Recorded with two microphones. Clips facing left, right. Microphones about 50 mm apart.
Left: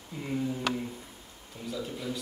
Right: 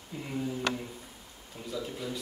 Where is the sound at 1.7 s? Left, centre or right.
Centre.